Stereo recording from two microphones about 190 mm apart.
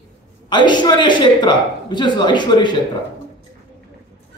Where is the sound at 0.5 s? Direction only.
25° left (ahead or behind).